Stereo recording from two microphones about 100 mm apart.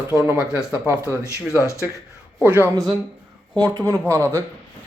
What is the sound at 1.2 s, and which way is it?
Speech, 30° left (ahead or behind).